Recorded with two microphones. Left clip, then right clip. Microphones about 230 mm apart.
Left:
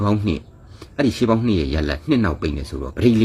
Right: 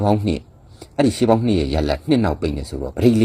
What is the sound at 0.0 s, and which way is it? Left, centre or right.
Speech, centre.